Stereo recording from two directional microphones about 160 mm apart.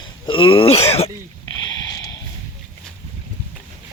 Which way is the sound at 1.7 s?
20° left (ahead or behind).